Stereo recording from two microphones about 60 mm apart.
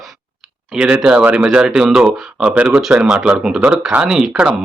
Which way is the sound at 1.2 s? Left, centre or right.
Right.